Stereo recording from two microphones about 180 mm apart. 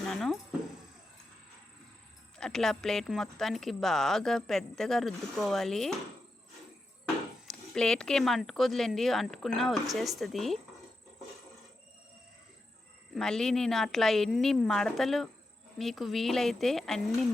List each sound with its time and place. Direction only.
0.0 s a sound: centre (ahead or behind)
2.4 s speech: centre (ahead or behind)
7.0 s speech: 5° left (ahead or behind)
13.1 s speech: centre (ahead or behind)